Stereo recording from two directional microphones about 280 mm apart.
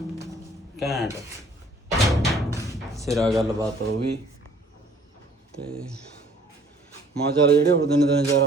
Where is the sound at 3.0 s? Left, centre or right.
Centre.